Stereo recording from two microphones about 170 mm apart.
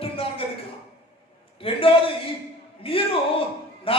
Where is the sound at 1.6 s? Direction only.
30° left (ahead or behind).